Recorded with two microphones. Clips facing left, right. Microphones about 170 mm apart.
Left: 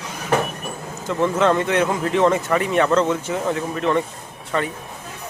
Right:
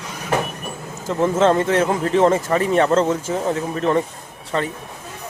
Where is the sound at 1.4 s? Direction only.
30° right (ahead or behind).